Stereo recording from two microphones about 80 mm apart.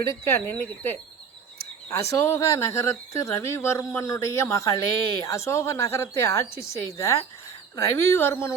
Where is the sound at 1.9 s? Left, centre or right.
Left.